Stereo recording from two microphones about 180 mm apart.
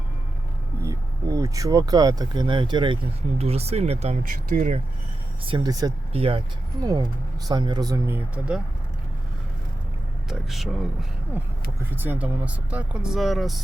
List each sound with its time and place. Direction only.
0.8 s speech: 15° right (ahead or behind); by 4.8 s 45° right (ahead or behind)
5.5 s speech: 25° right (ahead or behind)
6.8 s speech: 20° right (ahead or behind)
10.2 s speech: centre (ahead or behind)
11.9 s speech: 10° right (ahead or behind)